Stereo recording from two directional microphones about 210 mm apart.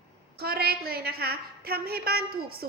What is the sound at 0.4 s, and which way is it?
A woman's voice, 45° right (ahead or behind).